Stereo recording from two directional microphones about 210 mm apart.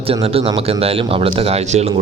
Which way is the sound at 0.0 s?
25° right (ahead or behind).